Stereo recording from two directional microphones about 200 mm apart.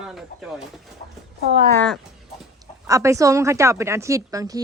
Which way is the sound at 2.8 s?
15° right (ahead or behind).